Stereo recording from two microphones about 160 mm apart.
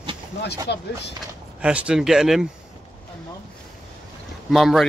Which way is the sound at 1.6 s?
5° right (ahead or behind).